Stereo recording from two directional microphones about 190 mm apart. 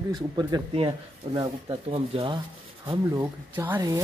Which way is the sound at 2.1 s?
30° right (ahead or behind).